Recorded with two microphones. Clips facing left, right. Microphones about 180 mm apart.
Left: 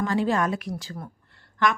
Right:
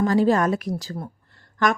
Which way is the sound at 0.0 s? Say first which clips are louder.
Right 5 dB; 40° right (ahead or behind).